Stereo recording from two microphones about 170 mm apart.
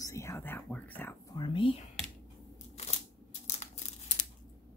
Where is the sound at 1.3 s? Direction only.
30° left (ahead or behind).